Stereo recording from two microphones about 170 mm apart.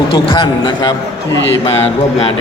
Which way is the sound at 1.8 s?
35° left (ahead or behind).